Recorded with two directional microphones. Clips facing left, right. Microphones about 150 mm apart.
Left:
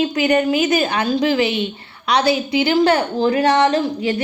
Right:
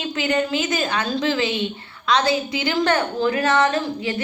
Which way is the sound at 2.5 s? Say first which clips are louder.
Left 8 dB; 25° left (ahead or behind).